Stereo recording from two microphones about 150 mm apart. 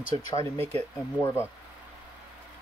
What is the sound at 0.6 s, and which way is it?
Speech, 15° left (ahead or behind).